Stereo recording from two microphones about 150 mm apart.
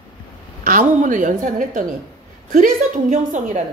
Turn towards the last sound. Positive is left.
turn(degrees=-55)  # may be behind; listen again after turning